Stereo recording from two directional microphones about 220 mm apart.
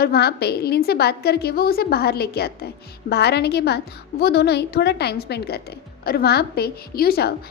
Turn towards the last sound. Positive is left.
turn(degrees=45)  # may be behind; listen again after turning